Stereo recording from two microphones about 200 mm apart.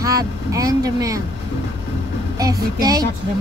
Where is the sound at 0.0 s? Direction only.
15° right (ahead or behind).